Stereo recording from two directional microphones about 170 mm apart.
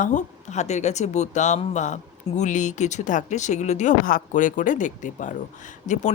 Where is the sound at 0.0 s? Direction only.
45° left (ahead or behind).